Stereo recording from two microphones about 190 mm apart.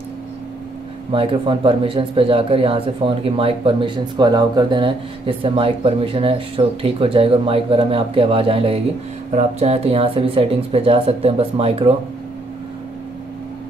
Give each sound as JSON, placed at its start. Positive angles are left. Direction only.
{"t": 1.1, "sound": "a man's voice", "side_deg": -30}